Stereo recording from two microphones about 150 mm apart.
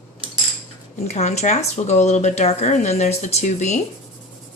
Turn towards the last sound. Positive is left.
turn(degrees=50)  # may be behind; listen again after turning